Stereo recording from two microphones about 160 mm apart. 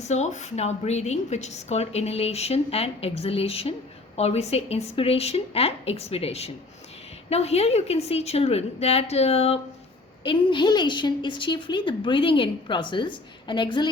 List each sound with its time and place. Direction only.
0.1 s a woman's voice: 45° left (ahead or behind); by 13.9 s 30° left (ahead or behind)